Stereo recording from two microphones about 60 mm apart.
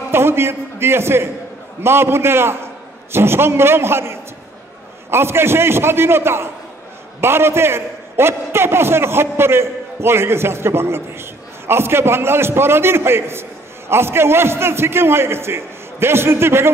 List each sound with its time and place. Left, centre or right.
0.1 s a man's voice: right